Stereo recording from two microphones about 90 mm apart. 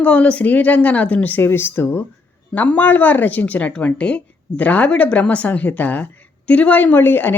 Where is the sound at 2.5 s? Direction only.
15° left (ahead or behind).